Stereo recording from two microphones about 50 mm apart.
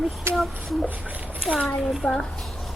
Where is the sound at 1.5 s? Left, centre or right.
Right.